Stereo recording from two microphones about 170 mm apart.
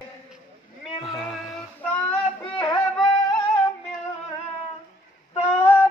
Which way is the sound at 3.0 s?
25° left (ahead or behind).